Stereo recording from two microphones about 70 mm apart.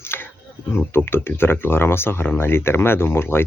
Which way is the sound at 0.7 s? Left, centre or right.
Left.